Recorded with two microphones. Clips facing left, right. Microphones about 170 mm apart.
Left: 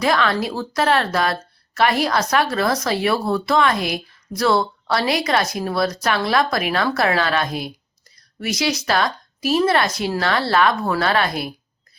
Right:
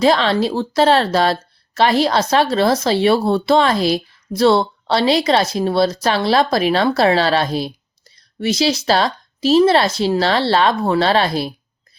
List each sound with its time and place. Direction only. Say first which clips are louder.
0.0 s a woman's voice: right 5 dB; 30° right (ahead or behind)